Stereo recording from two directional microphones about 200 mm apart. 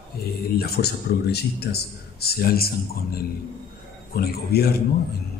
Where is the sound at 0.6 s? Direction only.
55° left (ahead or behind).